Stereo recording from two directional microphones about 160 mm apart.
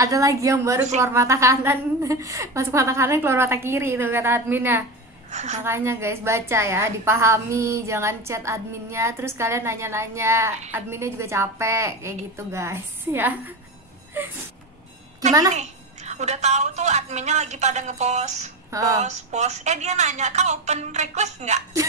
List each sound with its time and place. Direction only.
0.0 s a woman's voice: 20° right (ahead or behind)
5.3 s a woman's voice: 45° right (ahead or behind)
5.6 s a woman's voice: 15° right (ahead or behind)
15.5 s a woman's voice: 45° right (ahead or behind)
18.7 s speech: 20° right (ahead or behind)
18.9 s a woman's voice: 45° right (ahead or behind)